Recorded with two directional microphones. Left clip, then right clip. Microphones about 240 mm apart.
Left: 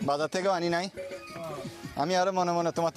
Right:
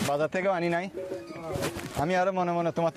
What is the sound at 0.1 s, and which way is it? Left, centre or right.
Speech, centre.